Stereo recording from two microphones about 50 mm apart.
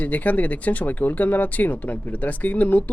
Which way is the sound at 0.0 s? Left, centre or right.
Left.